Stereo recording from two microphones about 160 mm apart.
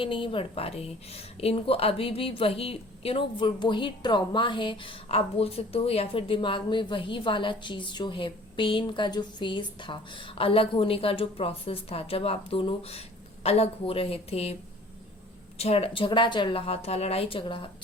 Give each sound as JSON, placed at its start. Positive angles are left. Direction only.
{"t": 0.0, "sound": "a woman's voice", "side_deg": 35}
{"t": 15.5, "sound": "a woman's voice", "side_deg": 40}